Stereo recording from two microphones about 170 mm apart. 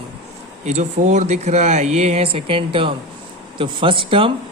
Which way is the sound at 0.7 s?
45° right (ahead or behind).